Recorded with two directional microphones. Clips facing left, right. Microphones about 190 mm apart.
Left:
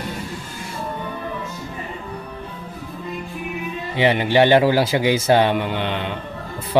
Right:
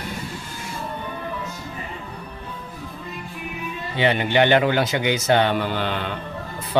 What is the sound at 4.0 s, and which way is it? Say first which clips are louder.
Speech: left 3 dB; 25° left (ahead or behind).